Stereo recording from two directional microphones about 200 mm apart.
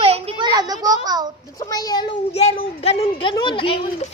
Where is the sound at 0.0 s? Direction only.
30° right (ahead or behind).